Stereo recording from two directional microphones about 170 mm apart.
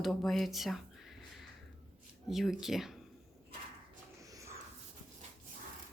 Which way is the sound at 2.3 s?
Centre (ahead or behind).